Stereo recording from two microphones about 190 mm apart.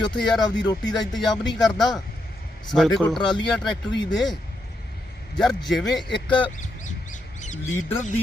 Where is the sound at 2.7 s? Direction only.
Centre (ahead or behind).